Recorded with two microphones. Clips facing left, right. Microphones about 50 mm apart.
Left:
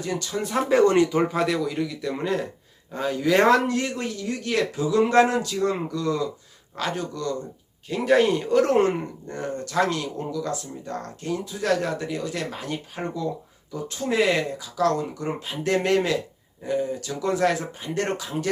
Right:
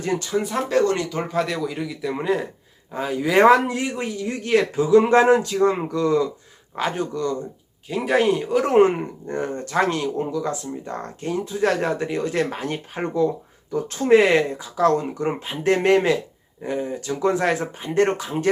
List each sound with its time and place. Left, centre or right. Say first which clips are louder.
0.0 s speech: right 4 dB; right
0.7 s speech: left 3 dB; centre
1.1 s a man's voice: left 2 dB; centre; by 7.3 s right
7.9 s a man's voice: even; centre
8.7 s speech: right 5 dB; right